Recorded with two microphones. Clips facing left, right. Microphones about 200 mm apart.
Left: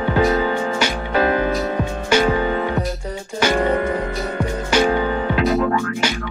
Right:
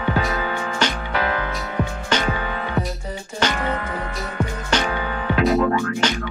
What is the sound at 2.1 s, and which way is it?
Music, 10° left (ahead or behind).